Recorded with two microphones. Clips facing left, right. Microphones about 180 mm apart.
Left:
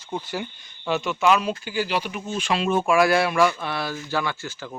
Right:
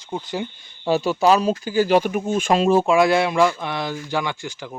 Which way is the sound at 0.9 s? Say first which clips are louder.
Right 4 dB; 35° right (ahead or behind).